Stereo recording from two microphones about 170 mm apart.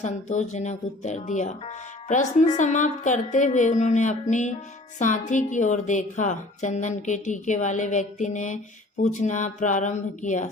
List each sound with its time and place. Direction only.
0.0 s speech: 40° left (ahead or behind)